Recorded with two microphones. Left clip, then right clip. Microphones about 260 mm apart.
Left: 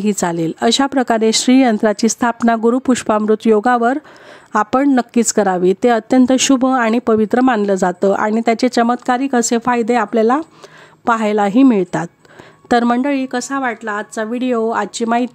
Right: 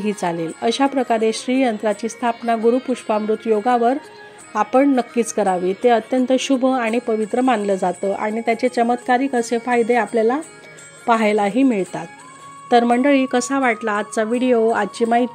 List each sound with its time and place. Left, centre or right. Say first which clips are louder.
0.0 s a woman's voice: left 4 dB; left
13.1 s a woman's voice: right 2 dB; centre